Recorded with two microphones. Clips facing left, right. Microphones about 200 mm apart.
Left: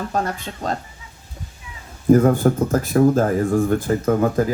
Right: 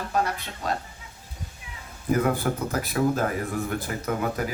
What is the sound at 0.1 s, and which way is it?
Speech, 45° left (ahead or behind).